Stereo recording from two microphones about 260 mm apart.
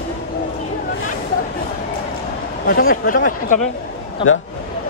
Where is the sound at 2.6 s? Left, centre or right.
Left.